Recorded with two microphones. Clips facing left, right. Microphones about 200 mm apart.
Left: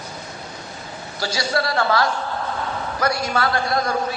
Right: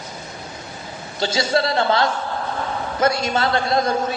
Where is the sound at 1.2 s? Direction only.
25° right (ahead or behind).